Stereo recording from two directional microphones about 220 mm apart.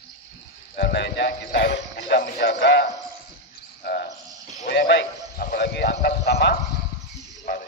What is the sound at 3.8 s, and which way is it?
Cricket, 45° left (ahead or behind).